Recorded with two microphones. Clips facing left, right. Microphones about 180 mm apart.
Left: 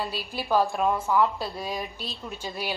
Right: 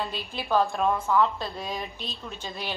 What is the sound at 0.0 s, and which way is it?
A woman's voice, 10° left (ahead or behind).